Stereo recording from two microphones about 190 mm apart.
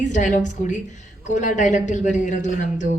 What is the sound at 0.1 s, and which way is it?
Speech, 40° left (ahead or behind).